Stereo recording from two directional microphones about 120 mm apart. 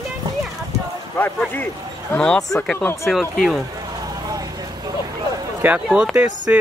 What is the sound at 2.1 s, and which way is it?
Speech, 5° left (ahead or behind).